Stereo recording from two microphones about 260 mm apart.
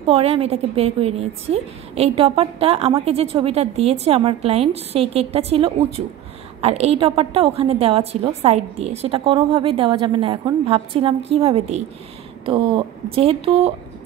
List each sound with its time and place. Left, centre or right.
0.0 s a woman's voice: right